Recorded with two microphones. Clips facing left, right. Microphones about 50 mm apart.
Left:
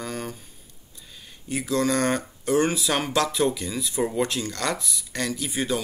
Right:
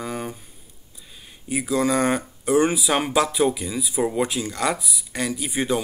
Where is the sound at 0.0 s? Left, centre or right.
Centre.